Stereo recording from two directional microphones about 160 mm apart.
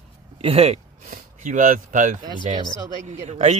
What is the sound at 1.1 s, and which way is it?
Speech, 55° right (ahead or behind).